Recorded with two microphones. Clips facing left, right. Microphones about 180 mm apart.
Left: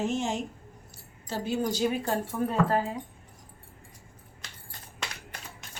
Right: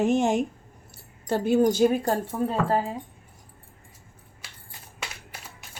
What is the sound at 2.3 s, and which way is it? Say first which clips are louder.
Speech: right 1 dB; 30° right (ahead or behind).